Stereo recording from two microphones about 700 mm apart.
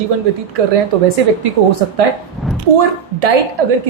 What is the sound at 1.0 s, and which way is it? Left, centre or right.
Speech, right.